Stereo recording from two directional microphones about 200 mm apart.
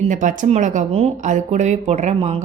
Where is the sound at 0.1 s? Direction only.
40° right (ahead or behind).